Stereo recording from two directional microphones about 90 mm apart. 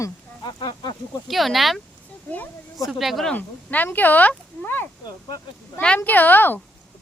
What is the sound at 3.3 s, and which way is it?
Speech, 20° left (ahead or behind).